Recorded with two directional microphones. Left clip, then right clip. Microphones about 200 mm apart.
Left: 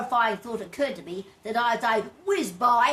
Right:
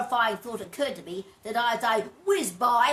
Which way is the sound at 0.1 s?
20° right (ahead or behind).